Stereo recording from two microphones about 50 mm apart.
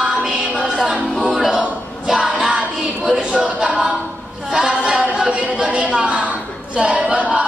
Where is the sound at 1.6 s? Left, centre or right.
Centre.